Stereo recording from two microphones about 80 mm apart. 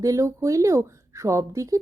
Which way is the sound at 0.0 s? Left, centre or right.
Right.